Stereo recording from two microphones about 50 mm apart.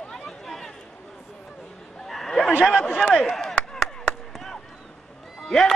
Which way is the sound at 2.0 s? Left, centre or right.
Centre.